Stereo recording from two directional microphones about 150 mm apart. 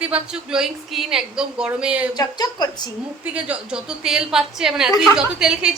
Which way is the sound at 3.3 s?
5° right (ahead or behind).